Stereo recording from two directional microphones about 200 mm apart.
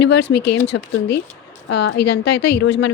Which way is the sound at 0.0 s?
60° left (ahead or behind).